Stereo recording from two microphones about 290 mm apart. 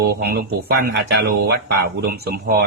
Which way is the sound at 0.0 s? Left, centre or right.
Right.